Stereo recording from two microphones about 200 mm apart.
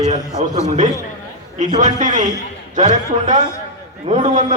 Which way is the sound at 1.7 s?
35° right (ahead or behind).